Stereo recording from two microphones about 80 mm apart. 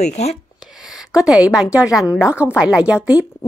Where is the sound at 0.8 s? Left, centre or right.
Centre.